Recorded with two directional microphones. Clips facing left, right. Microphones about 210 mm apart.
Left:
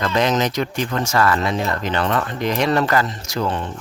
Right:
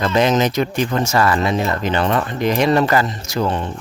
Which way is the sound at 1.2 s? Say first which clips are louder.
Right 1 dB; 25° right (ahead or behind).